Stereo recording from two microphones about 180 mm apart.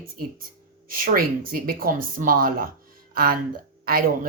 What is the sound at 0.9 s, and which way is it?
Speech, 55° right (ahead or behind).